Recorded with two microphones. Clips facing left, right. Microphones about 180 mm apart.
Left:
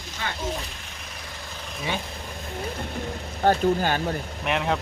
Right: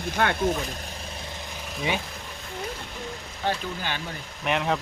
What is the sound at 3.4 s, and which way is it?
Speech, 45° left (ahead or behind).